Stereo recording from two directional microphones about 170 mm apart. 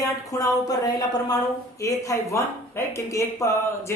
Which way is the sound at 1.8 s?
20° left (ahead or behind).